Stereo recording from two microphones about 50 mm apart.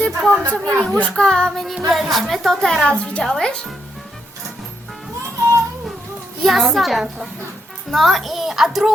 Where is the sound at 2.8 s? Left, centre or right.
Left.